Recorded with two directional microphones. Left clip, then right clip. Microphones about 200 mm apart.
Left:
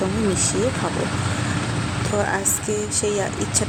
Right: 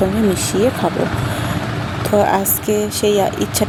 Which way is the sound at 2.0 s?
15° right (ahead or behind).